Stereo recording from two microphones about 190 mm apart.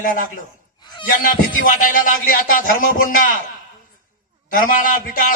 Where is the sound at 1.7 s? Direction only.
45° left (ahead or behind).